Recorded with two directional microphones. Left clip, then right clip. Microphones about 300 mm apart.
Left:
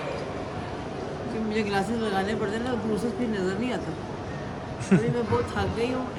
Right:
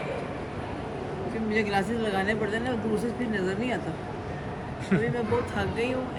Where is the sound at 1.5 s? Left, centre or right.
Centre.